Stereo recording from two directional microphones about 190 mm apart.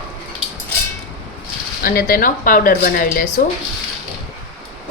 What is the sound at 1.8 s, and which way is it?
A woman's voice, 50° left (ahead or behind).